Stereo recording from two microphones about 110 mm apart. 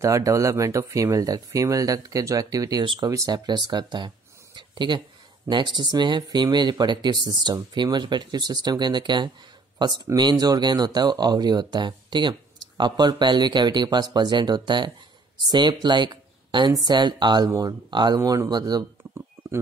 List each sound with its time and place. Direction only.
0.0 s speech: 30° right (ahead or behind)